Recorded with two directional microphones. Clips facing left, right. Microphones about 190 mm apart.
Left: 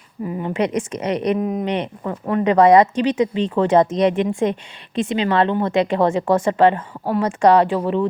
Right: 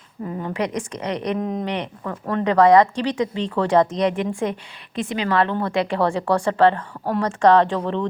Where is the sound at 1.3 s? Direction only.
5° left (ahead or behind).